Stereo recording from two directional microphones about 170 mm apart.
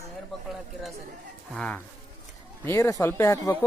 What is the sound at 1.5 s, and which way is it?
Insect, 5° left (ahead or behind).